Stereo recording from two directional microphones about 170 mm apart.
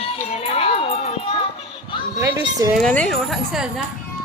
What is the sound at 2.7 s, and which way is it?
A woman's voice, 5° left (ahead or behind).